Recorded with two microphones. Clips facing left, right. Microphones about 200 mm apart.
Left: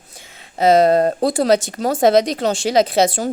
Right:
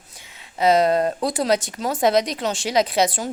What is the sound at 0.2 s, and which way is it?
A woman's voice, 45° left (ahead or behind).